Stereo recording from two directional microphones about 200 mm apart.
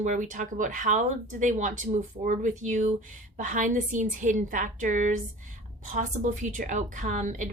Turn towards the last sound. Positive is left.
turn(degrees=-40)  # may be behind; listen again after turning